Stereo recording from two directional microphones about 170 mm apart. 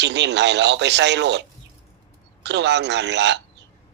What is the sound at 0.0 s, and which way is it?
Speech, 90° right.